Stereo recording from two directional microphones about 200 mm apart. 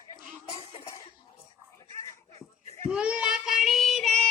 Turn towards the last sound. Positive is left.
turn(degrees=5)  # may be behind; listen again after turning